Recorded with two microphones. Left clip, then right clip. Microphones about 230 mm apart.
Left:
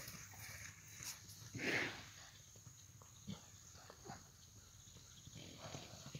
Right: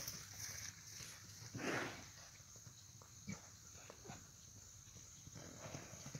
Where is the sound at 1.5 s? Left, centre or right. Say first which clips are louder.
Left 3 dB; centre.